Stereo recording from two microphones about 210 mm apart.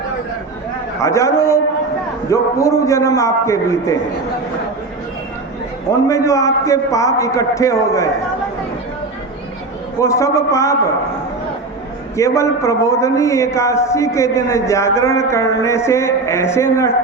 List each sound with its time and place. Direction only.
1.0 s a man's voice: 15° left (ahead or behind)
6.1 s a man's voice: 15° left (ahead or behind)
10.0 s a man's voice: 15° left (ahead or behind)
12.1 s a man's voice: 15° left (ahead or behind)